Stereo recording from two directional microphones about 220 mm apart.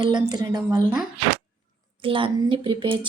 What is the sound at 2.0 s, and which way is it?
Speech, 25° right (ahead or behind).